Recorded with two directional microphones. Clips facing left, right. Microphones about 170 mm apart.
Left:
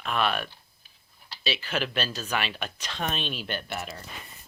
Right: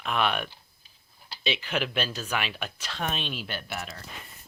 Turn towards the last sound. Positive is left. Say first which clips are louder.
# left 2 dB
turn(degrees=5)  # may be behind; listen again after turning